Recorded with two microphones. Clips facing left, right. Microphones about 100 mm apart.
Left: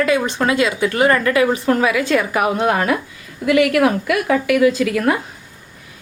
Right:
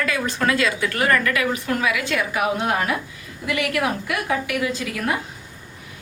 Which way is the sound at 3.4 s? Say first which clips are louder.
Left 9 dB; 60° left (ahead or behind).